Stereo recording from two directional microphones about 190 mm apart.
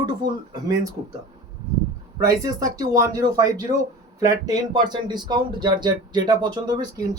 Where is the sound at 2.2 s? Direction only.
20° right (ahead or behind).